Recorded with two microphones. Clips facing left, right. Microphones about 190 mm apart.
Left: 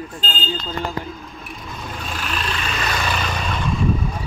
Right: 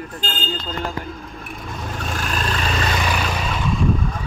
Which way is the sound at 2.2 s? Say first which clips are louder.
Right 2 dB; 45° right (ahead or behind).